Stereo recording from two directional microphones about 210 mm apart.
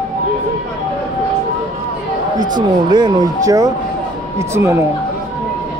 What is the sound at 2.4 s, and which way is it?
Speech, 20° right (ahead or behind).